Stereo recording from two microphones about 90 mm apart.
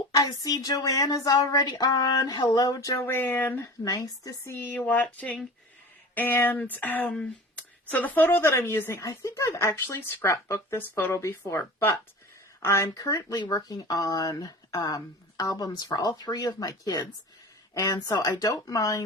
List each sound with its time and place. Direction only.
0.1 s speech: 40° left (ahead or behind)
3.0 s a woman's voice: 25° left (ahead or behind)
3.8 s speech: 40° left (ahead or behind)
4.5 s a woman's voice: 25° left (ahead or behind); by 19.0 s 40° left (ahead or behind)